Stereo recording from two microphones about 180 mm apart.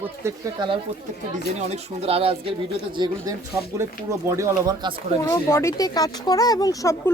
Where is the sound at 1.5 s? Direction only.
35° right (ahead or behind); by 4.9 s 20° right (ahead or behind).